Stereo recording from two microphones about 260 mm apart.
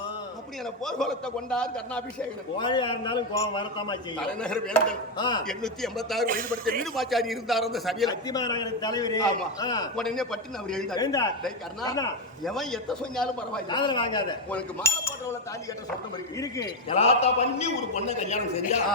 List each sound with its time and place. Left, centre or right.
0.9 s a man's voice: centre
2.6 s a man's voice: centre
4.3 s a man's voice: centre
5.1 s a man's voice: centre
5.5 s a man's voice: centre
6.2 s speech: right
6.9 s a man's voice: centre
8.3 s a man's voice: centre
9.9 s a man's voice: centre
10.9 s a man's voice: centre
12.5 s a man's voice: centre
13.7 s a man's voice: centre
16.4 s a man's voice: centre